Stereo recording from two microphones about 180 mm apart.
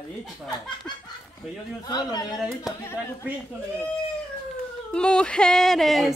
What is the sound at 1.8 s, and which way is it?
Speech, 20° left (ahead or behind).